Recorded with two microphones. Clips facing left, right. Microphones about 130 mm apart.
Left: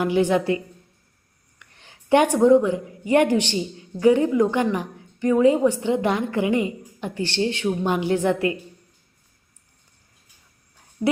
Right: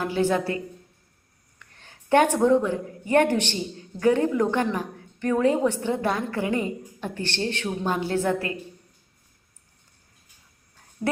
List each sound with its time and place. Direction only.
0.0 s a woman's voice: 15° left (ahead or behind)